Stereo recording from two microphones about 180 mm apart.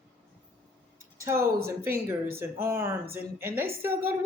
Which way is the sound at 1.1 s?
15° right (ahead or behind).